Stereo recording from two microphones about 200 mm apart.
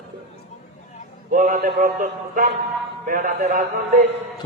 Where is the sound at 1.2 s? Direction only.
40° right (ahead or behind).